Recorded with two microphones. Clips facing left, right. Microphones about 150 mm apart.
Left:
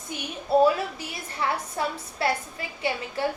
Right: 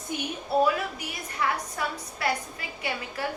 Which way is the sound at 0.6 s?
30° left (ahead or behind).